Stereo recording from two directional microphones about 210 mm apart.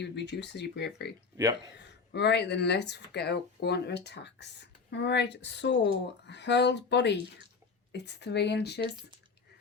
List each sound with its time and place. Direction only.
0.0 s speech: 55° left (ahead or behind)
1.4 s speech: 15° right (ahead or behind)
1.8 s speech: 55° left (ahead or behind)